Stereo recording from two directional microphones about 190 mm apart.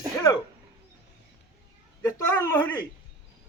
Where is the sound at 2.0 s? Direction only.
15° left (ahead or behind).